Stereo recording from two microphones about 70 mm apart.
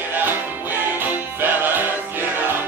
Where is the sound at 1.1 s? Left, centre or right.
Right.